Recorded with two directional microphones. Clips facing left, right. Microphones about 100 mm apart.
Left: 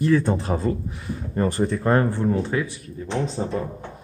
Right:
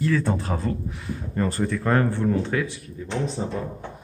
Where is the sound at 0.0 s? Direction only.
25° left (ahead or behind).